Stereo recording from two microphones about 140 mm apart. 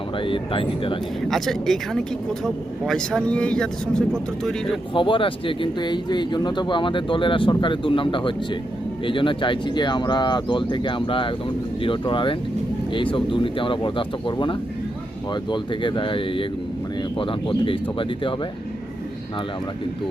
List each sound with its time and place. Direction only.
0.2 s speech: 40° left (ahead or behind)
1.3 s speech: centre (ahead or behind)
4.9 s speech: 35° left (ahead or behind)